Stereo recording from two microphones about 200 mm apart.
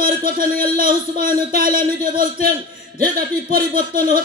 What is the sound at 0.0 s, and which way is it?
Speech, 45° right (ahead or behind).